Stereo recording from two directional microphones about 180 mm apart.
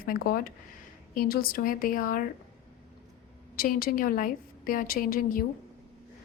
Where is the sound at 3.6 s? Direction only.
55° left (ahead or behind).